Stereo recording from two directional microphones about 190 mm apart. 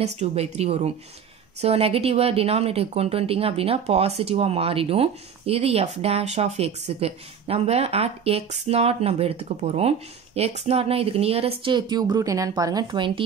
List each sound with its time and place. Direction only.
0.0 s a woman's voice: 35° right (ahead or behind)